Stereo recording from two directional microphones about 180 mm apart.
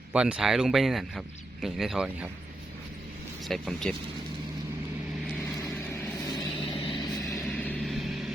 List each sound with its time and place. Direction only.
0.1 s speech: 5° right (ahead or behind)
3.4 s speech: centre (ahead or behind)
5.5 s vehicle: 15° left (ahead or behind)
6.6 s vehicle: 30° left (ahead or behind)
7.4 s vehicle: 10° left (ahead or behind)